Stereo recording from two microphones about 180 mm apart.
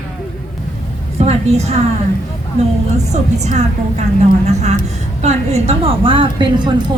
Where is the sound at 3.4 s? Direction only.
40° right (ahead or behind).